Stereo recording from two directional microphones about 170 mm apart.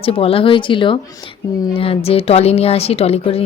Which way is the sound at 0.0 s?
35° left (ahead or behind).